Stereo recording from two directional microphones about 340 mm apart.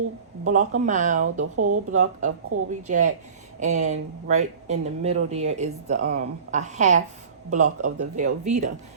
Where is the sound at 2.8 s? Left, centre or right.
Right.